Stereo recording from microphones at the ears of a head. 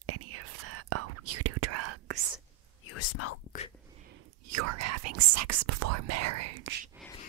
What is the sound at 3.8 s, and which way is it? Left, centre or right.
Whispering, right.